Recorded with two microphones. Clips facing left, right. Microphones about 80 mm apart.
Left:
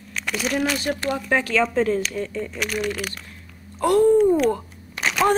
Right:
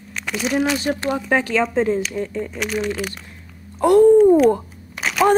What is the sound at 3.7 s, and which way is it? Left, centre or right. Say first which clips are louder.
Speech: right 5 dB; right.